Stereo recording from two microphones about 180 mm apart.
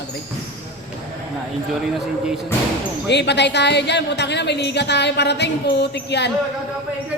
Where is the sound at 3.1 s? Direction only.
70° left (ahead or behind).